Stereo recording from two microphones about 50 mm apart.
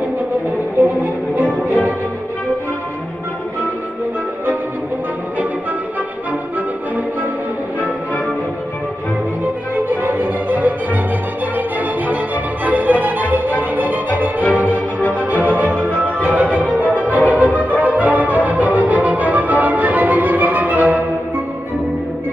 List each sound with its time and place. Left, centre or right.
1.0 s music: right
9.8 s music: right
12.6 s music: right